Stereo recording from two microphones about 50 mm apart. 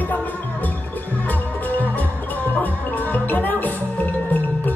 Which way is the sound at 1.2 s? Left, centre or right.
Left.